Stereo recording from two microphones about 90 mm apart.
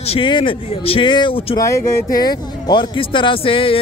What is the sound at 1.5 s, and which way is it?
Speech, 35° left (ahead or behind).